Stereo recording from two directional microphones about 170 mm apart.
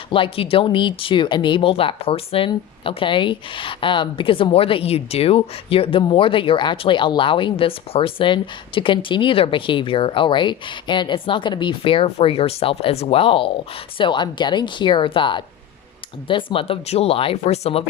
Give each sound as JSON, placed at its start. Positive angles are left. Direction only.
{"t": 0.1, "sound": "speech", "side_deg": 30}